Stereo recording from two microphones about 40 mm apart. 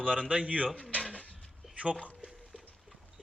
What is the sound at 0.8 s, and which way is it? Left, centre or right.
Speech, left.